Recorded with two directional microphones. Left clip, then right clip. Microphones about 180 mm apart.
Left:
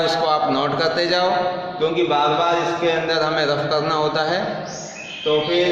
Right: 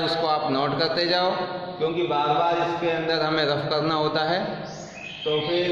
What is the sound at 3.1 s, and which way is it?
A man's voice, 15° right (ahead or behind).